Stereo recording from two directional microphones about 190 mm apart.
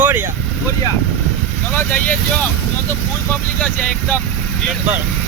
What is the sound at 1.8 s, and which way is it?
Speech, 10° left (ahead or behind).